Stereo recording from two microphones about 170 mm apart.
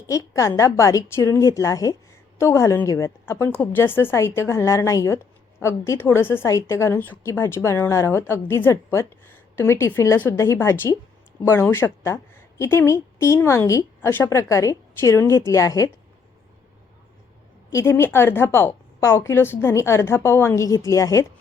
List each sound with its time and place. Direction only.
0.1 s a woman's voice: 20° left (ahead or behind)
17.7 s a woman's voice: 15° left (ahead or behind)